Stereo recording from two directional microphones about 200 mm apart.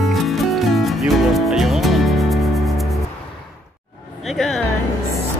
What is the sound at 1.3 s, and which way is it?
Music, centre (ahead or behind).